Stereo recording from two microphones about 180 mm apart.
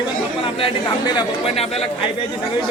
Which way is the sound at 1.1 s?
35° left (ahead or behind).